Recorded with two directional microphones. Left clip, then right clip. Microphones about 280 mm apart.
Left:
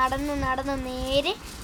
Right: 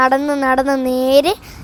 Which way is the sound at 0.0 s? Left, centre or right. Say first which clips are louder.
Right 11 dB; right.